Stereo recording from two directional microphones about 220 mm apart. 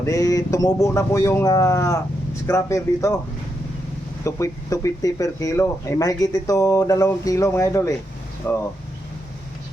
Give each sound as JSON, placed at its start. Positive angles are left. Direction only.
{"t": 0.0, "sound": "speech", "side_deg": 15}
{"t": 4.2, "sound": "speech", "side_deg": 15}